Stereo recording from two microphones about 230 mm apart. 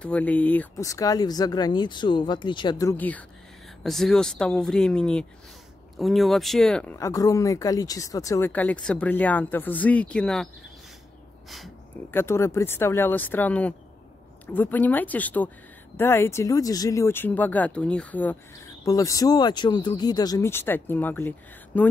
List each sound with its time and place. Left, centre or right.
0.0 s speech: centre
11.5 s speech: centre